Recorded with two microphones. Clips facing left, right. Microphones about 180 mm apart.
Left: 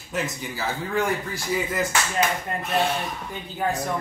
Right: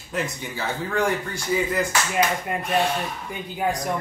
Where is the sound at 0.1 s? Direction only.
Centre (ahead or behind).